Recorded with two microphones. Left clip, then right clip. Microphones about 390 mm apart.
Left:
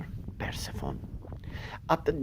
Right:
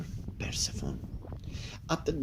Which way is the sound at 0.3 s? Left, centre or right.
Centre.